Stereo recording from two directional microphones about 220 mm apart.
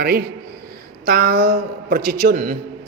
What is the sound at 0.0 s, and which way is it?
A man's voice, 45° right (ahead or behind).